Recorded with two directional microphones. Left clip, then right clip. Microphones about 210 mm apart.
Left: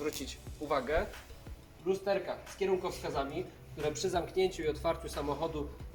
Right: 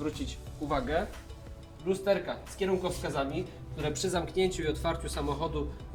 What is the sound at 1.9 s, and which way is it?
Speech, centre (ahead or behind).